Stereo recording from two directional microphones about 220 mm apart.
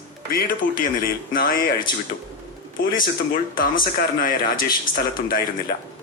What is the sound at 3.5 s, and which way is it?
A man's voice, 40° left (ahead or behind).